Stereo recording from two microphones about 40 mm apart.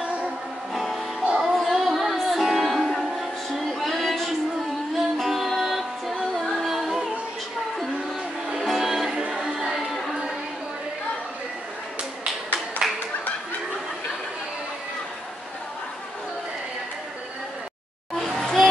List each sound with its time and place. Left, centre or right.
0.7 s music: centre
8.5 s music: centre
9.1 s music: centre
12.8 s clapping: centre
18.1 s a sound: centre